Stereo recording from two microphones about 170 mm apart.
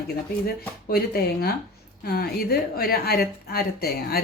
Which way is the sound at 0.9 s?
65° left (ahead or behind).